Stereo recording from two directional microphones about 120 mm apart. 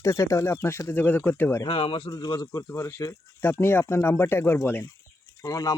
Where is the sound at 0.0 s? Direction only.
25° left (ahead or behind).